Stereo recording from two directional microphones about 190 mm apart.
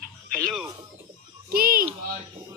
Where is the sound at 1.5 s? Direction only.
50° right (ahead or behind).